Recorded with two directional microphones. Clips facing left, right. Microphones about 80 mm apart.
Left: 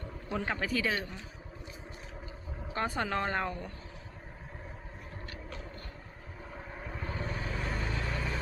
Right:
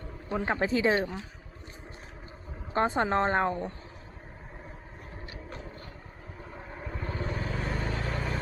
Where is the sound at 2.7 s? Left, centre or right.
Right.